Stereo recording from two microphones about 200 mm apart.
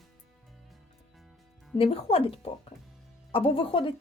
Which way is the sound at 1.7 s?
30° left (ahead or behind).